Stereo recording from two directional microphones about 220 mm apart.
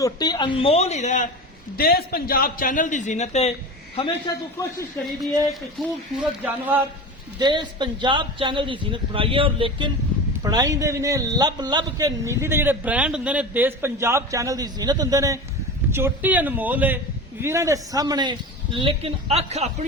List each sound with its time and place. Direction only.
0.0 s speech: 20° left (ahead or behind)
1.7 s a man's voice: 45° left (ahead or behind); by 4.1 s 25° left (ahead or behind)
5.8 s a man's voice: centre (ahead or behind)
7.3 s a man's voice: 20° right (ahead or behind)